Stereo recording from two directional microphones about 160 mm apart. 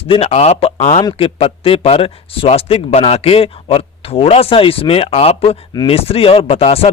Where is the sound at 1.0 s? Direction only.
35° left (ahead or behind).